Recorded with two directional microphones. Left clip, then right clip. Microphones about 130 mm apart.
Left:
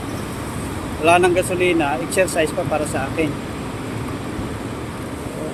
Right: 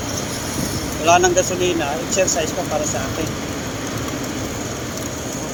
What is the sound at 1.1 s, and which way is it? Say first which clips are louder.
Speech: even; 90° left.